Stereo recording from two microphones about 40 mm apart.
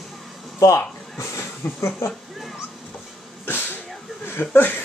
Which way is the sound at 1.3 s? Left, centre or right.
Left.